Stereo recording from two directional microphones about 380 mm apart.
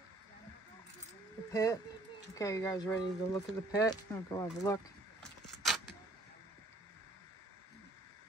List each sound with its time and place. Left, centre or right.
1.5 s speech: centre
5.2 s keys jangling: centre